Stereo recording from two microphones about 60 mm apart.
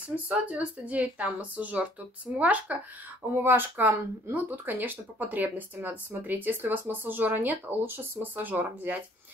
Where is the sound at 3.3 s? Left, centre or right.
Right.